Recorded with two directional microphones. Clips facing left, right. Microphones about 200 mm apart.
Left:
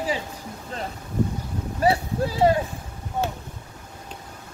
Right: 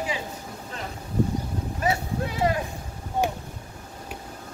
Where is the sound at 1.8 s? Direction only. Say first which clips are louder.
Left 5 dB; 30° left (ahead or behind).